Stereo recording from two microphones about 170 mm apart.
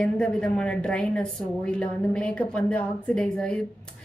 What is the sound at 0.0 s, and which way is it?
A woman's voice, 5° left (ahead or behind).